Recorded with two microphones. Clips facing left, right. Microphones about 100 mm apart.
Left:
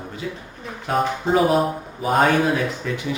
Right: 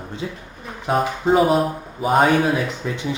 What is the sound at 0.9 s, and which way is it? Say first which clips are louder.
Speech: right 2 dB; centre (ahead or behind).